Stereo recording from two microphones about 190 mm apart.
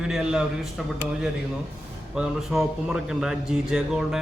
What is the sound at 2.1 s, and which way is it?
A man's voice, centre (ahead or behind).